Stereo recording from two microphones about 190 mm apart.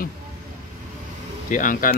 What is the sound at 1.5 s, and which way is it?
Speech, 45° left (ahead or behind).